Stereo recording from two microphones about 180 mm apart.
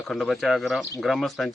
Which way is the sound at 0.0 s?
Centre (ahead or behind).